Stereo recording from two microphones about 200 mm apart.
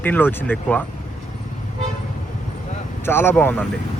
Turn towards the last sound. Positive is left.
turn(degrees=10)  # may be behind; listen again after turning